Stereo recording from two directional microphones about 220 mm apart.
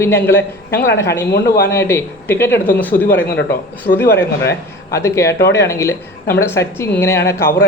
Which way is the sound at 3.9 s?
50° left (ahead or behind).